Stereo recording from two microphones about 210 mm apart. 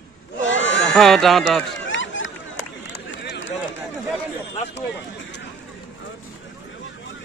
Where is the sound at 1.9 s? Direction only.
65° left (ahead or behind).